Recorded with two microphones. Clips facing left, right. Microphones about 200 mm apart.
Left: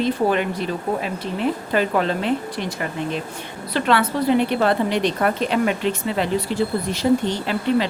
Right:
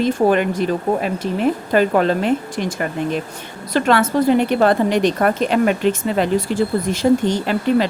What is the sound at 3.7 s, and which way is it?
Speech, 45° right (ahead or behind).